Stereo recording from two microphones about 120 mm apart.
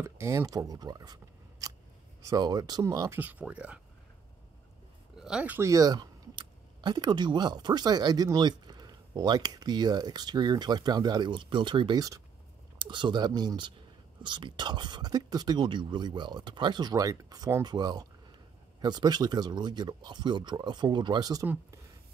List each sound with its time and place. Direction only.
0.0 s speech: 20° right (ahead or behind)
3.2 s speech: 15° right (ahead or behind)
5.1 s speech: 5° right (ahead or behind)
5.6 s speech: 30° right (ahead or behind)